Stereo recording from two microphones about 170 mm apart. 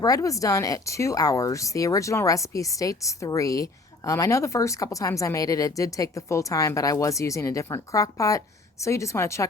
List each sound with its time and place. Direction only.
0.0 s a woman's voice: 20° left (ahead or behind)